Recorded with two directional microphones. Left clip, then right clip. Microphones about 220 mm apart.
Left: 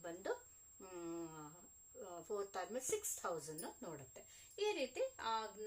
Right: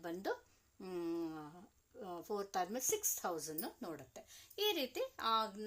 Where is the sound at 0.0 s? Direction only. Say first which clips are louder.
Right 3 dB; 40° right (ahead or behind).